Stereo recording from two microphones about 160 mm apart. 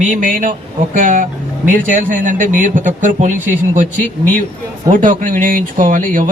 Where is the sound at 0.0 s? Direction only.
55° right (ahead or behind).